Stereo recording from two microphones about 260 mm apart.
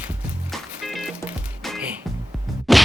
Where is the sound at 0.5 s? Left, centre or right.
Centre.